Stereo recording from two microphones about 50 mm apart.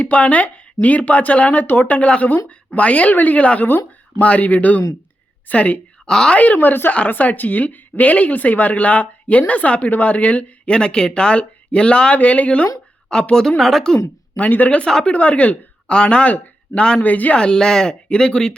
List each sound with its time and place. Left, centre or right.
0.0 s speech: left
6.1 s speech: centre
6.3 s speech: left
10.8 s a woman's voice: centre
13.6 s speech: centre
14.3 s speech: left
17.0 s speech: left
17.3 s speech: centre